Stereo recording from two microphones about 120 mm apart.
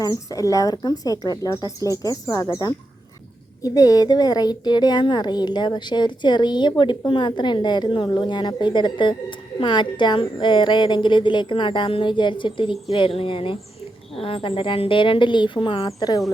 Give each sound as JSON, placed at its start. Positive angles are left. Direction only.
{"t": 0.0, "sound": "a woman's voice", "side_deg": 30}
{"t": 16.0, "sound": "a woman's voice", "side_deg": 35}